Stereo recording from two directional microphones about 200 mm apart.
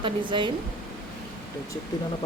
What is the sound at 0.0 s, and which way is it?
Speech, 25° right (ahead or behind).